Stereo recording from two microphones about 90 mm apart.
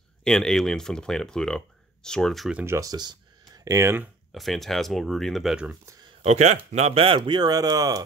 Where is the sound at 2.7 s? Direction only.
40° right (ahead or behind).